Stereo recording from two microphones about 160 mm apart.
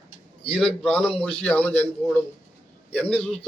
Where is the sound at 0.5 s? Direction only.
5° left (ahead or behind).